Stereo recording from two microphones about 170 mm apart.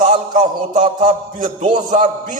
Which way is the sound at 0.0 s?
45° right (ahead or behind).